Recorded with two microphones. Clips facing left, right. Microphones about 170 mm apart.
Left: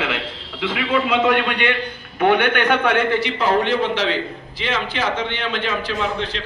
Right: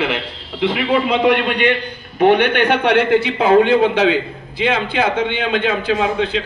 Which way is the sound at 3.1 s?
55° right (ahead or behind).